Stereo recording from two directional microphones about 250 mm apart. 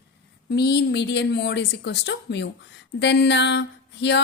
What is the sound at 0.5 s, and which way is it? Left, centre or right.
Speech, left.